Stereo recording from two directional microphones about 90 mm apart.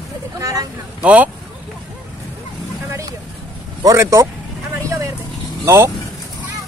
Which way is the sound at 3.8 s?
40° right (ahead or behind).